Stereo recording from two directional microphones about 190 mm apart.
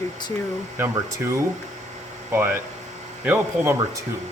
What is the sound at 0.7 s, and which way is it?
Speech, 15° right (ahead or behind).